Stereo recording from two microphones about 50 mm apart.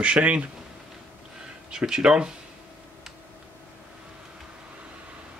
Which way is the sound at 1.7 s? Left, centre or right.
Centre.